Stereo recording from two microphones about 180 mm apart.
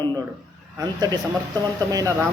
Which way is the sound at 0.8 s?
20° right (ahead or behind).